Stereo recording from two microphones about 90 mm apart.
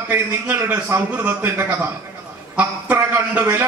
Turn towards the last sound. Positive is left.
turn(degrees=-25)  # may be behind; listen again after turning